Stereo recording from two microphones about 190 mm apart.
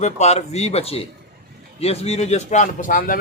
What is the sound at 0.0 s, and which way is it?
A man's voice, 35° left (ahead or behind).